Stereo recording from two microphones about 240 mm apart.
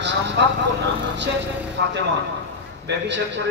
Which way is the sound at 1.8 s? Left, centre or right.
Right.